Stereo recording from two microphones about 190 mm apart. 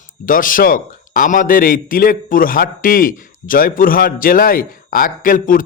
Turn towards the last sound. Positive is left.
turn(degrees=45)  # may be behind; listen again after turning